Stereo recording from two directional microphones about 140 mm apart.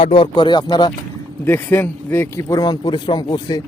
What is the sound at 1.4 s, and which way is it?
Speech, 15° left (ahead or behind).